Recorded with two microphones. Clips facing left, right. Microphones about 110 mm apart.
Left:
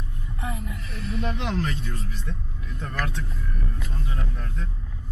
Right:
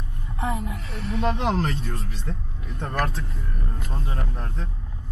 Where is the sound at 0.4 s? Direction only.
30° right (ahead or behind).